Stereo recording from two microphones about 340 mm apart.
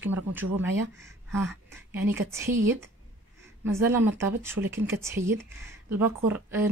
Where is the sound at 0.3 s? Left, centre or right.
Centre.